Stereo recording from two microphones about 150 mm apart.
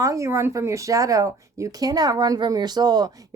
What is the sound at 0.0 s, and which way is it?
Speech, 20° right (ahead or behind).